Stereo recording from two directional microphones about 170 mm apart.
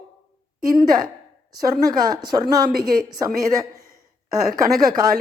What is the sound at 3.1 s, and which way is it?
Speech, 20° right (ahead or behind).